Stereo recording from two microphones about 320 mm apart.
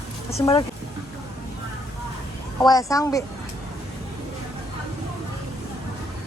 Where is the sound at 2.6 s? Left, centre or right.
Centre.